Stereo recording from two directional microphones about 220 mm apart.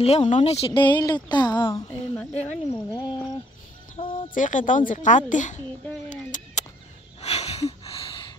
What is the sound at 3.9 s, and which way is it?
Speech, 30° left (ahead or behind).